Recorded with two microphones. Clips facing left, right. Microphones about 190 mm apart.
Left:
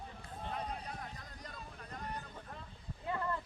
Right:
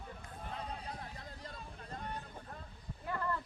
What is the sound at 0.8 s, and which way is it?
Hubbub, 30° right (ahead or behind).